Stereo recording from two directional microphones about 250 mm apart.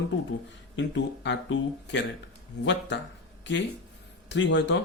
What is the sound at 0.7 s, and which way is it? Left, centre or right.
Speech, left.